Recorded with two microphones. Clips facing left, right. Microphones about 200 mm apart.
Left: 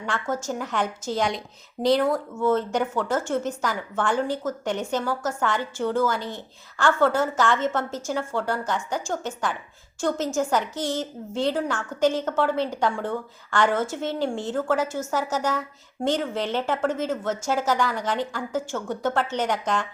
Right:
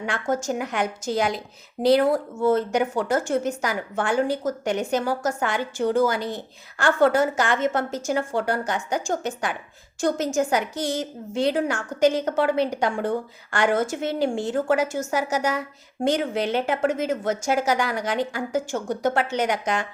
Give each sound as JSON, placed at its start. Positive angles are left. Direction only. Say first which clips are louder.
{"t": 0.0, "sound": "a woman's voice", "louder": "right 3 dB", "side_deg": -15}
{"t": 2.0, "sound": "speech", "louder": "right 2 dB", "side_deg": -35}
{"t": 2.6, "sound": "a woman's voice", "louder": "right 2 dB", "side_deg": -10}